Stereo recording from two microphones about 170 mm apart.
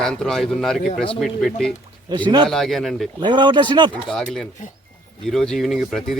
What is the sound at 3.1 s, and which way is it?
Speech, 25° right (ahead or behind).